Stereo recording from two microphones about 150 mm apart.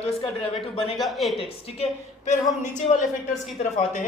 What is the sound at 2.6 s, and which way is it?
Speech, 55° left (ahead or behind).